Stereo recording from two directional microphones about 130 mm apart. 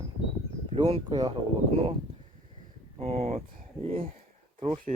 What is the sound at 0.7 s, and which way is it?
Speech, 45° right (ahead or behind).